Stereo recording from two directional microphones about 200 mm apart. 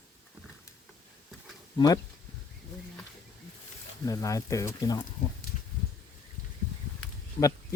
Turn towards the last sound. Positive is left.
turn(degrees=15)  # may be behind; listen again after turning